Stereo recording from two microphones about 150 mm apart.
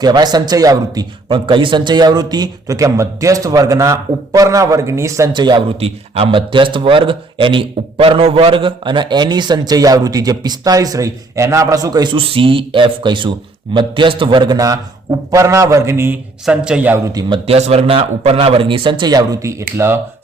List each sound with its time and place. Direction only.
0.0 s a man's voice: 25° right (ahead or behind); by 17.0 s 10° right (ahead or behind)
17.1 s a man's voice: 30° right (ahead or behind)